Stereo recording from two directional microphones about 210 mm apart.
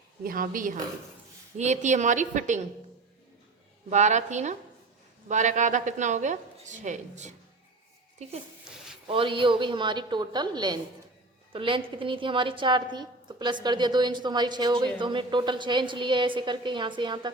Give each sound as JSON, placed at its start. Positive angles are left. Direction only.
{"t": 0.2, "sound": "a woman's voice", "side_deg": -45}
{"t": 3.8, "sound": "a woman's voice", "side_deg": -35}
{"t": 9.0, "sound": "a woman's voice", "side_deg": -25}